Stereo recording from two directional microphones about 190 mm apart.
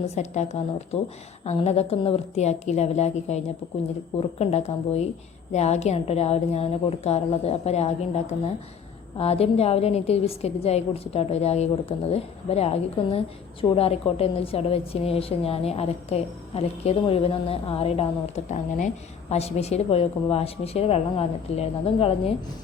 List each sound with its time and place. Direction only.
0.2 s a woman's voice: 35° left (ahead or behind)